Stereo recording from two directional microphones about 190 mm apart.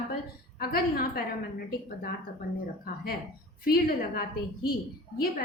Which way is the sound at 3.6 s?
50° left (ahead or behind).